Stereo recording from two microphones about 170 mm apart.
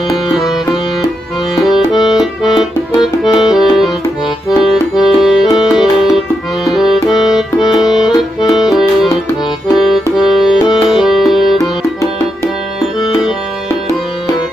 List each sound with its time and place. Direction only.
1.6 s music: centre (ahead or behind)
2.1 s accordion: centre (ahead or behind)
7.3 s music: centre (ahead or behind)
8.0 s accordion: 25° left (ahead or behind)
8.5 s music: centre (ahead or behind)
10.1 s music: centre (ahead or behind)